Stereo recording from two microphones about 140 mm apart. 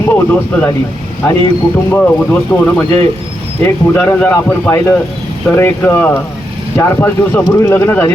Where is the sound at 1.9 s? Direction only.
10° left (ahead or behind).